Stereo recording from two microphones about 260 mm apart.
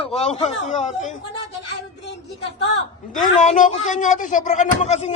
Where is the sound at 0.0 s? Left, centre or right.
Left.